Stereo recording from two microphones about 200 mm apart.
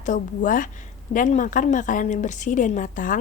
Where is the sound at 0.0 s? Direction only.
40° left (ahead or behind).